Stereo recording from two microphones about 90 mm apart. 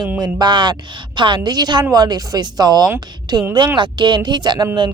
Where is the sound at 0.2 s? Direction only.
50° right (ahead or behind).